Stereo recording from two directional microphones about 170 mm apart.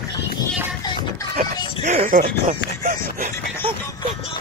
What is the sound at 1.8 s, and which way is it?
Speech, 45° right (ahead or behind).